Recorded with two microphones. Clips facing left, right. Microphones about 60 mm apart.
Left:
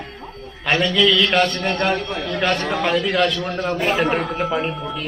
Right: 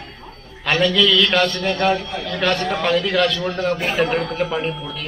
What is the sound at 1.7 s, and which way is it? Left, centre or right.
Speech, left.